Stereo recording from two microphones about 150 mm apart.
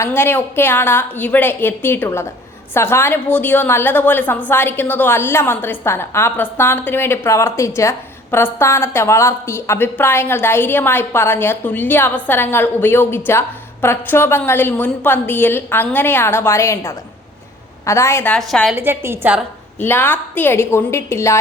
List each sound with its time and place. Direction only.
0.0 s a woman's voice: 15° left (ahead or behind)
18.3 s a woman's voice: 5° left (ahead or behind)
18.8 s a woman's voice: 15° right (ahead or behind)
19.8 s a woman's voice: 15° left (ahead or behind)